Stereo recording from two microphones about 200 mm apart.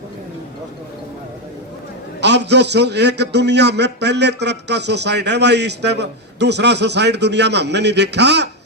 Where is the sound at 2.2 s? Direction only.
60° right (ahead or behind).